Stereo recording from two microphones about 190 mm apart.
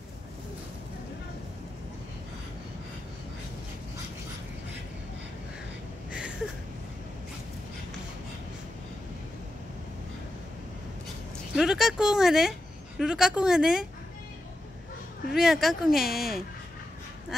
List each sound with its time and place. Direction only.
11.5 s speech: centre (ahead or behind)
15.3 s speech: centre (ahead or behind)
17.3 s a sound: centre (ahead or behind)